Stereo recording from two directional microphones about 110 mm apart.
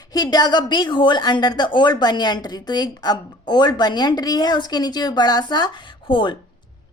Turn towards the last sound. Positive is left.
turn(degrees=50)  # may be behind; listen again after turning